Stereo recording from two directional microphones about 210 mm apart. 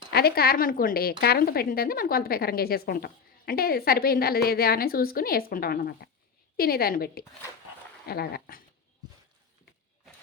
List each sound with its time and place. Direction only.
0.1 s a woman's voice: 50° left (ahead or behind)